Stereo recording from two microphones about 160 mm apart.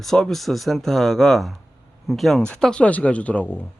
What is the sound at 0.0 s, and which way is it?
A man's voice, centre (ahead or behind).